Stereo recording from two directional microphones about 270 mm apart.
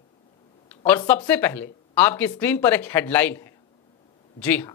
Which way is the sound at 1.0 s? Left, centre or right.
Centre.